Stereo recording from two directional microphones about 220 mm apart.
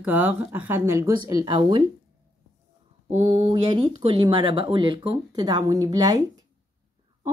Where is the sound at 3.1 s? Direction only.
30° right (ahead or behind).